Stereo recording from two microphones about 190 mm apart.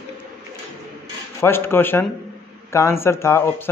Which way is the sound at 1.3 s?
10° left (ahead or behind).